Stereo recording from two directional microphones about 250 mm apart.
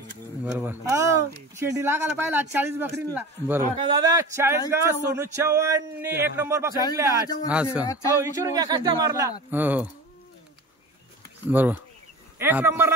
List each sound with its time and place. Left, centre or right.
0.4 s a man's voice: centre
7.8 s speech: centre
8.2 s speech: centre
11.5 s speech: centre